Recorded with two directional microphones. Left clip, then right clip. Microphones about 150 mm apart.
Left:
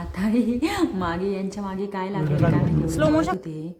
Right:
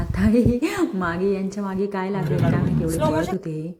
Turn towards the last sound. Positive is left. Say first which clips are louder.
# right 4 dB
turn(degrees=-20)  # may be behind; listen again after turning